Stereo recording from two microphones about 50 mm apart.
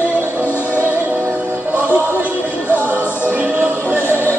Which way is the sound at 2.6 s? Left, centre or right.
Left.